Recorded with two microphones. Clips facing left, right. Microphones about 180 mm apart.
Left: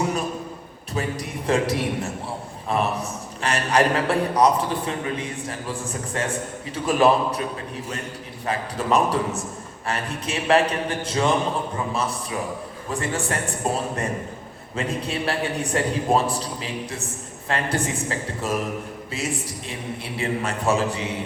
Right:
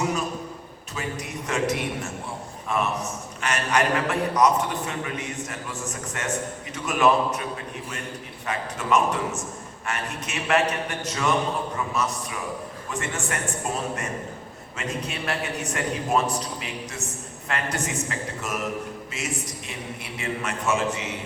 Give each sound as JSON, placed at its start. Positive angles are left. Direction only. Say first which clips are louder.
{"t": 0.9, "sound": "a man's voice", "louder": "left 4 dB", "side_deg": 35}
{"t": 8.4, "sound": "a man's voice", "louder": "left 2 dB", "side_deg": 35}
{"t": 12.9, "sound": "a man's voice", "louder": "left 4 dB", "side_deg": 35}